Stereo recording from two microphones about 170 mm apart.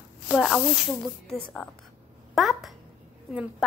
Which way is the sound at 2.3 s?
Centre (ahead or behind).